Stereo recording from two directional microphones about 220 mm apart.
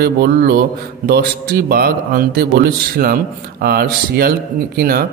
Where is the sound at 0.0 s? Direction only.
45° right (ahead or behind).